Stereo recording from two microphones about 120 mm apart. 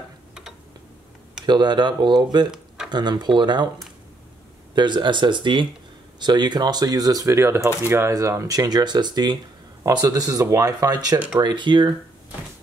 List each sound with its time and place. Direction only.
0.3 s a sound: 5° right (ahead or behind)
1.4 s speech: 40° right (ahead or behind)
4.7 s speech: 40° right (ahead or behind)